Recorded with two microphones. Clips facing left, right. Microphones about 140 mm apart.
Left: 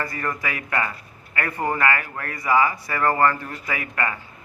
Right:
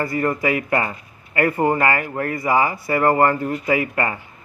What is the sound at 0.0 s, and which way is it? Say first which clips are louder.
Speech: right 7 dB; 25° right (ahead or behind).